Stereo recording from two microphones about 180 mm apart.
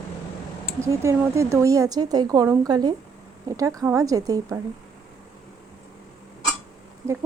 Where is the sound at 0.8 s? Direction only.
15° right (ahead or behind).